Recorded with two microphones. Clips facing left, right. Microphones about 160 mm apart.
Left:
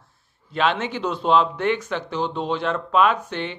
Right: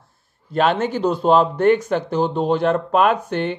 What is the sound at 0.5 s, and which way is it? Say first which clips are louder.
Speech: right 4 dB; 45° right (ahead or behind).